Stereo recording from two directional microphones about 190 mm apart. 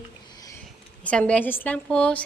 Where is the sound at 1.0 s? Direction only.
5° left (ahead or behind).